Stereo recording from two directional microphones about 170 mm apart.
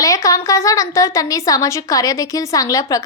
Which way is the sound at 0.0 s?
20° left (ahead or behind).